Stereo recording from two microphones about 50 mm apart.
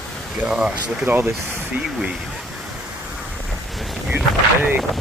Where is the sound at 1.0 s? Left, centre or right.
Right.